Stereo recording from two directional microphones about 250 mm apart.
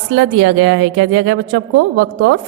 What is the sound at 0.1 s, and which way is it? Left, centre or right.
A woman's voice, right.